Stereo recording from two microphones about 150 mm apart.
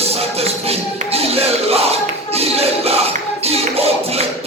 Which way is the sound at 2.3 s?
40° right (ahead or behind).